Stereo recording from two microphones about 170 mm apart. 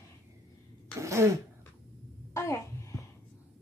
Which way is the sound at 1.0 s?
15° right (ahead or behind).